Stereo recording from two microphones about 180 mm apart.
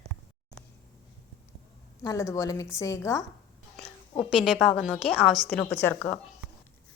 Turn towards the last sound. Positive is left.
turn(degrees=10)  # may be behind; listen again after turning